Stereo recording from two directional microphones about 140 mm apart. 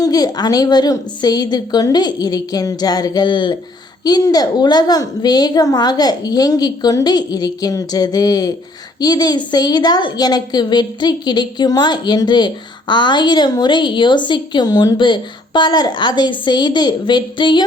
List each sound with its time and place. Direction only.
0.0 s a woman's voice: 25° left (ahead or behind)